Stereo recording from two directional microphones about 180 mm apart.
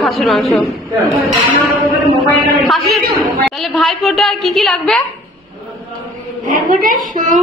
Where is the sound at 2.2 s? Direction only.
Centre (ahead or behind).